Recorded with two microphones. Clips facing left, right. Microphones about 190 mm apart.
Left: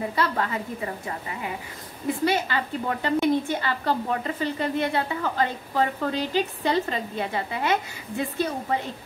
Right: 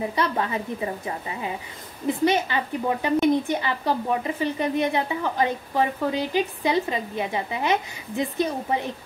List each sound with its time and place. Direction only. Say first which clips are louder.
0.1 s a woman's voice: right 1 dB; 20° right (ahead or behind)